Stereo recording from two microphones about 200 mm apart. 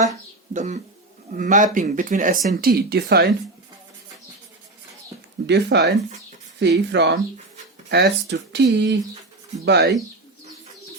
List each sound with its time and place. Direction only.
0.5 s speech: 35° right (ahead or behind); by 3.2 s 50° right (ahead or behind)
5.5 s speech: 60° right (ahead or behind)